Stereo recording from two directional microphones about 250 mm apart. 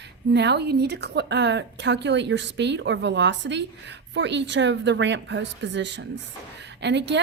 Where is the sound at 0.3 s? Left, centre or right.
Right.